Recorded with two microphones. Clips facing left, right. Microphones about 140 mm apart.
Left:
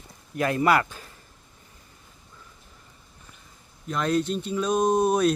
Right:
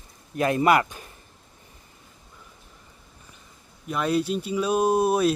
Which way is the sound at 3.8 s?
10° right (ahead or behind).